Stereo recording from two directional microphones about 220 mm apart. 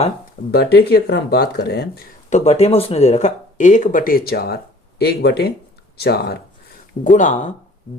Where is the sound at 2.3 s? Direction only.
30° left (ahead or behind); by 6.3 s 45° left (ahead or behind).